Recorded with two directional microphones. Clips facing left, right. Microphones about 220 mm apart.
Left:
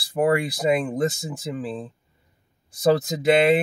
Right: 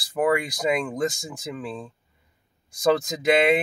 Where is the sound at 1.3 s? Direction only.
30° left (ahead or behind).